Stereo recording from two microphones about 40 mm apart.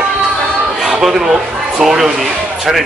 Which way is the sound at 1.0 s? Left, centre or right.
Centre.